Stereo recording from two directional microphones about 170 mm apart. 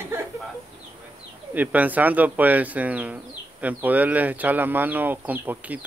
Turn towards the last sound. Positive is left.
turn(degrees=-10)  # may be behind; listen again after turning